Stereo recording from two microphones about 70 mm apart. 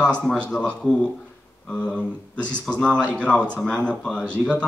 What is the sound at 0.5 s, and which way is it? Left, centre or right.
Speech, left.